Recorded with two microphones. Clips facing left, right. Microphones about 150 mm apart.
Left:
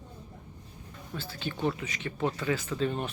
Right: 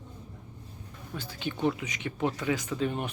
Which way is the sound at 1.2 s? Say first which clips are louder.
Right 2 dB; 15° right (ahead or behind).